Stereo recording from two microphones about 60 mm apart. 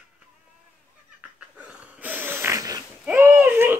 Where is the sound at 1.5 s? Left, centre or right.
Right.